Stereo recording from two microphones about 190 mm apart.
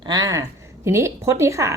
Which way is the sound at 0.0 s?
20° right (ahead or behind).